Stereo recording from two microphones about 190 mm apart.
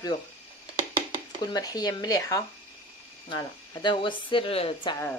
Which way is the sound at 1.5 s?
20° left (ahead or behind).